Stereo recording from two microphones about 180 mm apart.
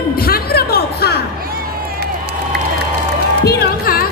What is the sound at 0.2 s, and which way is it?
Music, 55° left (ahead or behind).